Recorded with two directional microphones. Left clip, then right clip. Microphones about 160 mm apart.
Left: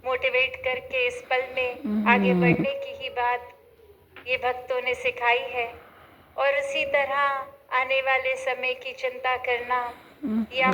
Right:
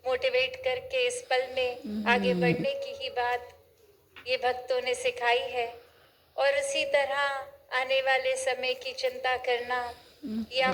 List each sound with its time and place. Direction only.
0.0 s a woman's voice: 35° right (ahead or behind)
10.2 s speech: 10° left (ahead or behind)